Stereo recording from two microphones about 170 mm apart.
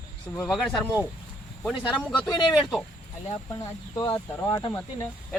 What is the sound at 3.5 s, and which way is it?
Speech, 25° left (ahead or behind).